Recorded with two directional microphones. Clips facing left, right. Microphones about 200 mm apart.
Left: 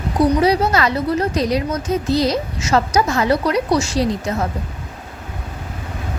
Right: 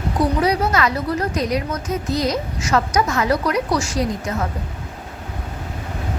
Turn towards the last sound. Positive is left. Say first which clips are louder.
# left 3 dB
turn(degrees=30)  # may be behind; listen again after turning